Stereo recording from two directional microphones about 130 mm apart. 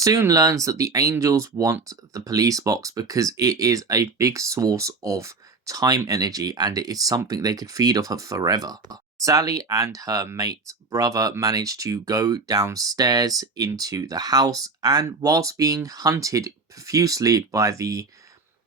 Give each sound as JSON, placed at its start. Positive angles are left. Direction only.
{"t": 0.0, "sound": "speech", "side_deg": -25}